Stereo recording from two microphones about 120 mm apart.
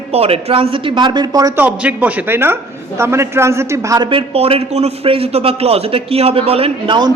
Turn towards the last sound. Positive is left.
turn(degrees=-40)  # may be behind; listen again after turning